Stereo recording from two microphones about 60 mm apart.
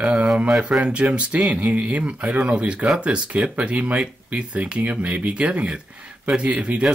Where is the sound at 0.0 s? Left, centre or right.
Centre.